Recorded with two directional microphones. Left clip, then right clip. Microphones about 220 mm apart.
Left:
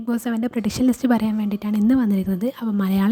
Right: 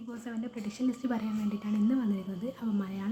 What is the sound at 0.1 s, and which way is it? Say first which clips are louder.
A woman's voice: left 16 dB; 50° left (ahead or behind).